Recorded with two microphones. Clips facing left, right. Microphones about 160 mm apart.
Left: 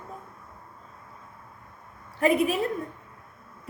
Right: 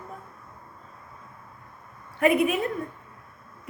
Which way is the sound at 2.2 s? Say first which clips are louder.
Right 1 dB; 35° left (ahead or behind).